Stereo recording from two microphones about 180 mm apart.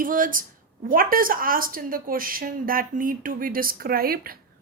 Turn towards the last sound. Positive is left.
turn(degrees=-55)  # may be behind; listen again after turning